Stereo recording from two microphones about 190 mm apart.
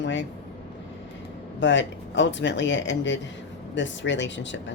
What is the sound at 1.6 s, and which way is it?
Speech, 70° left (ahead or behind).